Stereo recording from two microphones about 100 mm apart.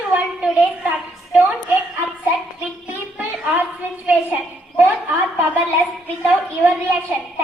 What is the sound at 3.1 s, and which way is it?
Speech, 15° right (ahead or behind).